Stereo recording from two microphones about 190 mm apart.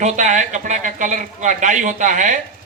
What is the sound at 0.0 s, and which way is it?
A man's voice, 40° right (ahead or behind).